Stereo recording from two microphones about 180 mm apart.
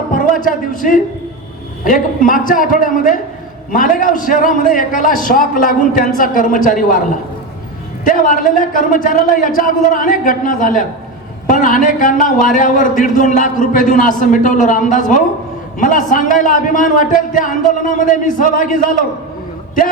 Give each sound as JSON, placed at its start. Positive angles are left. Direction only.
{"t": 0.1, "sound": "a sound", "side_deg": 50}
{"t": 1.8, "sound": "a man's voice", "side_deg": 50}
{"t": 8.0, "sound": "a man's voice", "side_deg": 50}